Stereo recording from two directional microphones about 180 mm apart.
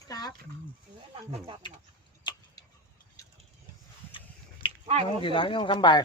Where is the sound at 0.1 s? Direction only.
20° left (ahead or behind).